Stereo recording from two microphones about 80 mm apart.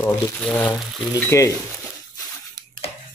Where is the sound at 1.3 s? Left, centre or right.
Left.